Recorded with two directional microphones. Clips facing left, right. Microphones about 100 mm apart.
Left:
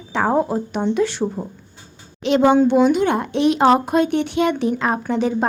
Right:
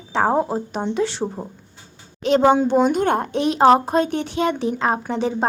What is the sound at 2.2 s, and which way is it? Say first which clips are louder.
A woman's voice: left 1 dB; 40° right (ahead or behind).